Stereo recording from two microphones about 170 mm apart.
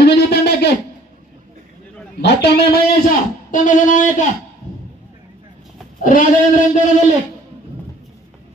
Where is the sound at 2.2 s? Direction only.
80° left.